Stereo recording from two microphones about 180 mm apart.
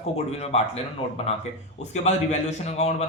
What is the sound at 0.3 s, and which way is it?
Speech, 35° left (ahead or behind).